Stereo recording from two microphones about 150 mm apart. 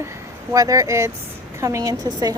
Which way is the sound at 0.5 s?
25° right (ahead or behind).